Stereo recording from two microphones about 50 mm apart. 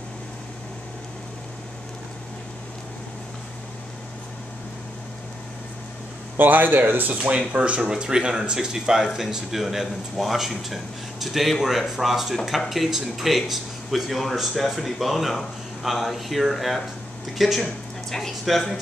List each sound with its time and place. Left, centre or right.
6.3 s speech: right
7.8 s speech: centre